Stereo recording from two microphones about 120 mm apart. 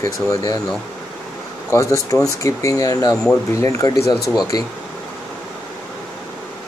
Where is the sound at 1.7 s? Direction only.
25° left (ahead or behind).